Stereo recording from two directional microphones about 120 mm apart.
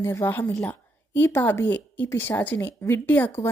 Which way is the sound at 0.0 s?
20° left (ahead or behind).